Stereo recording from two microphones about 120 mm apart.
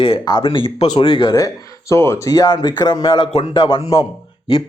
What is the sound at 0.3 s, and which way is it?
A man's voice, 40° left (ahead or behind).